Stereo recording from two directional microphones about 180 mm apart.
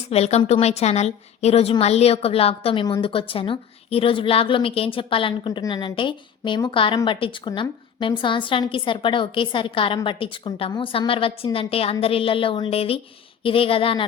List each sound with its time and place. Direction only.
0.1 s a woman's voice: 35° left (ahead or behind)